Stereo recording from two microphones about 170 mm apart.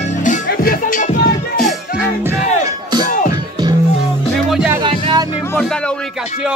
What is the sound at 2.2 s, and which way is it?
Music, 15° right (ahead or behind).